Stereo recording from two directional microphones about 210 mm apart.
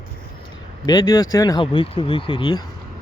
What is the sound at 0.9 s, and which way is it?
Speech, 15° left (ahead or behind).